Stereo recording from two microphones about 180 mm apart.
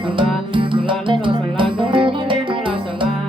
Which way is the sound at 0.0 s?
25° right (ahead or behind).